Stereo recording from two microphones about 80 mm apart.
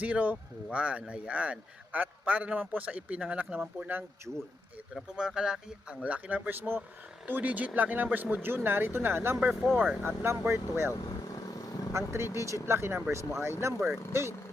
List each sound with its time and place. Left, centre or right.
0.0 s speech: centre
4.3 s speech: centre; by 9.4 s right
9.5 s speech: centre
10.0 s speech: right
10.9 s vehicle: left
11.9 s speech: right